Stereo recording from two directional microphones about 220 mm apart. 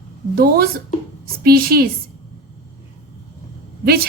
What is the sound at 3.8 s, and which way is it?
Speech, 45° right (ahead or behind).